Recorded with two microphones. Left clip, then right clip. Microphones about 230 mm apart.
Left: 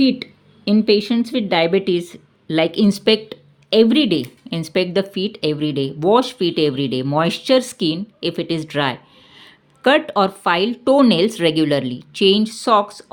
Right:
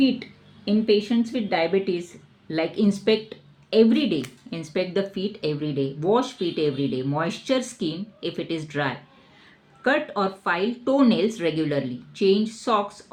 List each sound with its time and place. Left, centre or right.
0.0 s speech: left